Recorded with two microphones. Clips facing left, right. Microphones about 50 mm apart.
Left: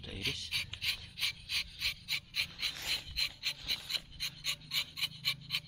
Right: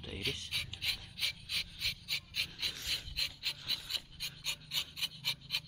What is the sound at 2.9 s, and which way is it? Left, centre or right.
Filing, centre.